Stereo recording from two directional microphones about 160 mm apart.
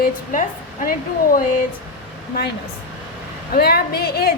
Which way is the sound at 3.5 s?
80° left.